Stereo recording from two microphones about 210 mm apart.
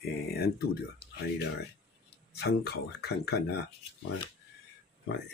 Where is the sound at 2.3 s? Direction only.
50° left (ahead or behind).